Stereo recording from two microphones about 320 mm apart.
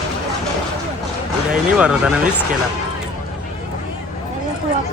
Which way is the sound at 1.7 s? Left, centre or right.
Centre.